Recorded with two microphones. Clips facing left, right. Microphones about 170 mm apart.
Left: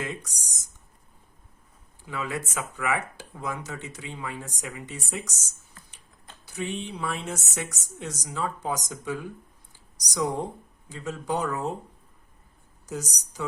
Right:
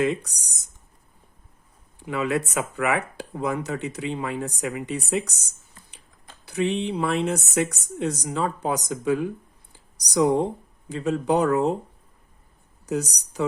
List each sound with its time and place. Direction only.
0.0 s speech: 70° right (ahead or behind)
2.0 s speech: 65° right (ahead or behind)
6.4 s speech: 65° right (ahead or behind)
12.8 s speech: 65° right (ahead or behind)